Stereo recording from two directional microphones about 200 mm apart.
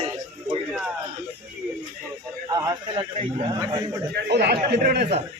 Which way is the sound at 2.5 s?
20° right (ahead or behind).